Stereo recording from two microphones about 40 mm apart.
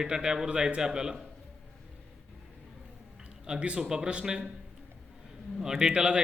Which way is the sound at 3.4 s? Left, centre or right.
Right.